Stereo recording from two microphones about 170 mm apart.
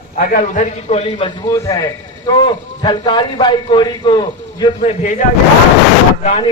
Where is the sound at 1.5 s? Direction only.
20° left (ahead or behind).